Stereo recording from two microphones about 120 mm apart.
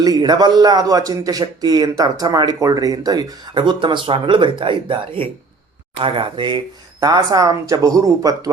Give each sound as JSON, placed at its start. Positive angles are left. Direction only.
{"t": 0.0, "sound": "a man's voice", "side_deg": -35}
{"t": 3.5, "sound": "speech", "side_deg": -40}